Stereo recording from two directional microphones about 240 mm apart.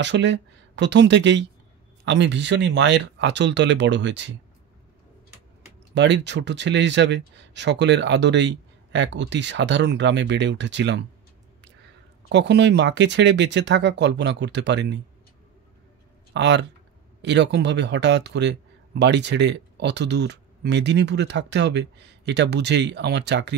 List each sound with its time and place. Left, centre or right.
0.0 s speech: right
5.9 s speech: right
12.3 s speech: right
16.3 s speech: right